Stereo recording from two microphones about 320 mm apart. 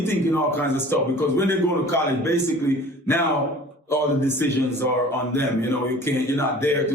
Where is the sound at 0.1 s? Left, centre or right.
Centre.